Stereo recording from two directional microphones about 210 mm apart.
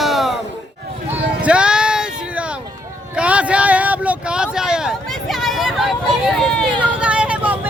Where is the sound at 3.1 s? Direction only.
5° right (ahead or behind).